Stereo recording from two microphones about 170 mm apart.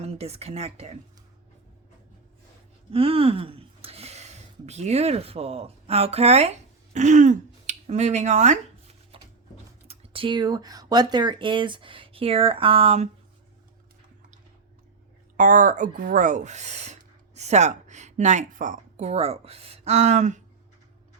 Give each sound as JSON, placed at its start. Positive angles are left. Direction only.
{"t": 0.0, "sound": "speech", "side_deg": -35}
{"t": 2.9, "sound": "speech", "side_deg": -35}
{"t": 9.1, "sound": "a sound", "side_deg": -30}
{"t": 9.8, "sound": "speech", "side_deg": -35}
{"t": 15.4, "sound": "speech", "side_deg": -50}